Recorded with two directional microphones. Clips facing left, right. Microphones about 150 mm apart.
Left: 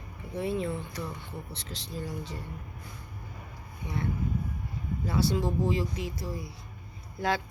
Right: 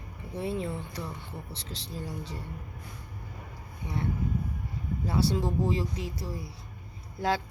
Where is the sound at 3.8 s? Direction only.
30° right (ahead or behind).